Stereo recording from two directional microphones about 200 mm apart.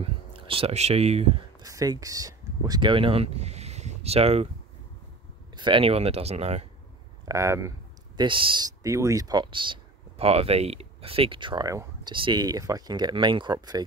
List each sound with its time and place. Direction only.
0.0 s speech: 25° right (ahead or behind)
1.6 s speech: 20° right (ahead or behind)
5.6 s speech: 25° right (ahead or behind)
7.2 s speech: 15° right (ahead or behind)
8.2 s speech: 25° right (ahead or behind)